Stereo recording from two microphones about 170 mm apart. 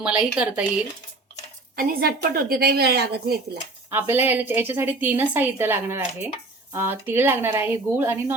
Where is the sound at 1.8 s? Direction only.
60° right (ahead or behind).